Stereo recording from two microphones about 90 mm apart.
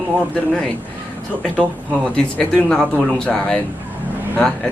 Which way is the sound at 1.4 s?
10° left (ahead or behind).